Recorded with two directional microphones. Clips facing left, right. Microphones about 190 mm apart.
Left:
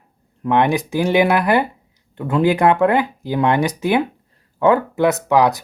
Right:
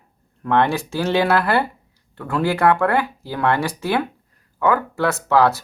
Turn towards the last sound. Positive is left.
turn(degrees=15)  # may be behind; listen again after turning